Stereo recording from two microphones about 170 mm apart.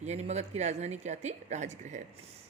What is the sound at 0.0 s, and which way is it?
A woman's voice, 40° right (ahead or behind).